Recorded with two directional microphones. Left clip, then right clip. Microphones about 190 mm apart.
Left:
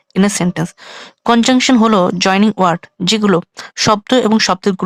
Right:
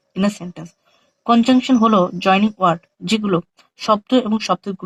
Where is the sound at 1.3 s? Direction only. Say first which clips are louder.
Left 4 dB; 35° left (ahead or behind).